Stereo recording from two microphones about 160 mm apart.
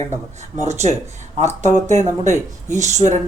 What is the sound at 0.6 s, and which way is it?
Speech, 45° right (ahead or behind).